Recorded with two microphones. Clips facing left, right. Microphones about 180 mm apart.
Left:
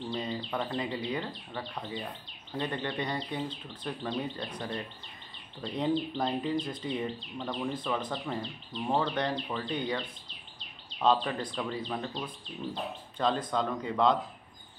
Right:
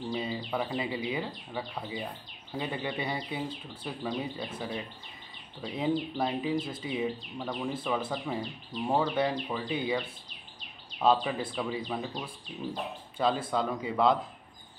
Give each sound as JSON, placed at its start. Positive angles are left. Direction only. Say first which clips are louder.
{"t": 0.1, "sound": "speech", "louder": "right 1 dB", "side_deg": -10}
{"t": 5.6, "sound": "speech", "louder": "even", "side_deg": -5}
{"t": 13.2, "sound": "speech", "louder": "right 1 dB", "side_deg": -5}